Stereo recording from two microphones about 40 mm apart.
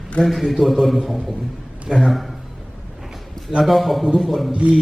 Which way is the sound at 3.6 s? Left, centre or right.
Centre.